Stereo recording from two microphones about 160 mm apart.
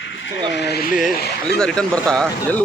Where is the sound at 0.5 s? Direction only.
90° left.